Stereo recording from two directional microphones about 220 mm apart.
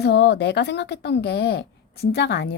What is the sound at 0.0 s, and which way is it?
A woman's voice, 50° left (ahead or behind).